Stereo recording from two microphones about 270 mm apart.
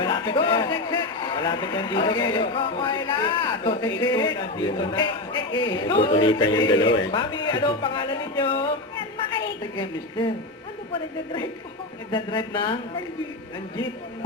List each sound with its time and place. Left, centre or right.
0.0 s a man's voice: centre
12.1 s a man's voice: centre